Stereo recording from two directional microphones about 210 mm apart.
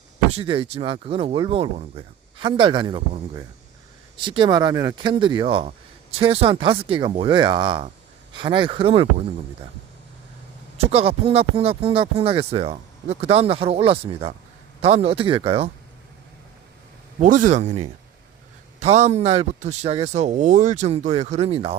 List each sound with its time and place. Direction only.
0.3 s speech: 30° right (ahead or behind)
10.8 s speech: 30° right (ahead or behind)
17.2 s speech: 40° right (ahead or behind)